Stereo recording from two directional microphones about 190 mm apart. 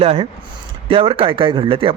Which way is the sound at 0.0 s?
30° right (ahead or behind).